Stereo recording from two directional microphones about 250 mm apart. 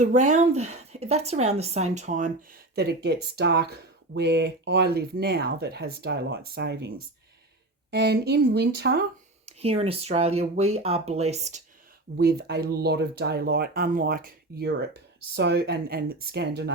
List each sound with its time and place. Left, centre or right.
0.0 s speech: right
8.0 s speech: right
9.5 s speech: right
12.1 s speech: right